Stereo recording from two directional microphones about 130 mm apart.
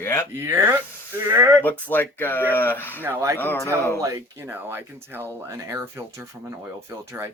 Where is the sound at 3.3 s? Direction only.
20° left (ahead or behind).